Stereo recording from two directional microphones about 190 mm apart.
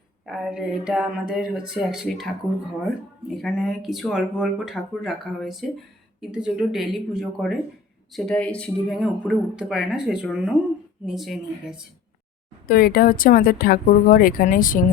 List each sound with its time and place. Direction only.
0.3 s speech: 5° right (ahead or behind)
12.6 s speech: 50° left (ahead or behind)